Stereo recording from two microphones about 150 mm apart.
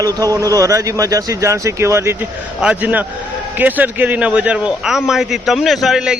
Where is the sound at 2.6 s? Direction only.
10° right (ahead or behind).